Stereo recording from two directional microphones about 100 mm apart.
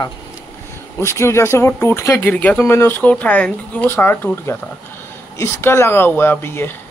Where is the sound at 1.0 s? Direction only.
25° left (ahead or behind).